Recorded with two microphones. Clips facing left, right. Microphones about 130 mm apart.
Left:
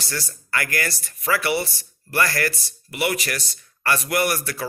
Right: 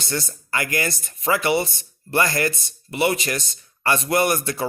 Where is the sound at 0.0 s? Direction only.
20° right (ahead or behind).